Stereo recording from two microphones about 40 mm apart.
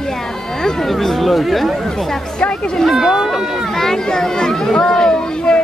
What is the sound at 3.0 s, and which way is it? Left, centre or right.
Speech, centre.